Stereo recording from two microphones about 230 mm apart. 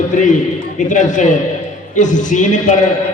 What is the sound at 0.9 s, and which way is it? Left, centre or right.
A man's voice, left.